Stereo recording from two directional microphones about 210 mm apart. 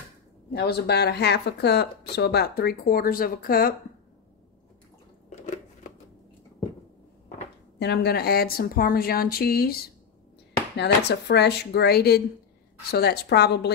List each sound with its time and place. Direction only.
0.5 s speech: 50° left (ahead or behind)
5.3 s a sound: 35° left (ahead or behind)
7.8 s speech: 50° left (ahead or behind)
10.8 s speech: 50° left (ahead or behind)